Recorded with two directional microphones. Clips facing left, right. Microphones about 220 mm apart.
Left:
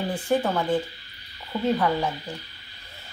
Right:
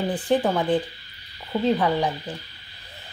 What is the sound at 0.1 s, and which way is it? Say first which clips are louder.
Speech: right 1 dB; 15° right (ahead or behind).